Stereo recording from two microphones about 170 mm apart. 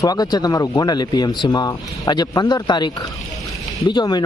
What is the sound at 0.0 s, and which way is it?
Speech, 25° left (ahead or behind).